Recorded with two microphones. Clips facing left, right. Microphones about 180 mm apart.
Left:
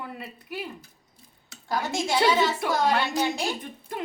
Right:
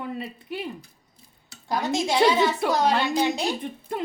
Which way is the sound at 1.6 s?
20° right (ahead or behind).